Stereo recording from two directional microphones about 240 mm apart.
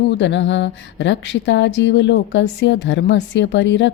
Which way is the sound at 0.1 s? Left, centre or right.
Left.